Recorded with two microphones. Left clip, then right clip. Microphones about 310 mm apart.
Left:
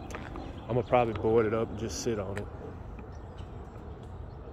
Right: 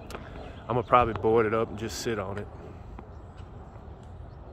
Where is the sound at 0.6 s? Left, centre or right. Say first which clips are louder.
Right 4 dB; centre.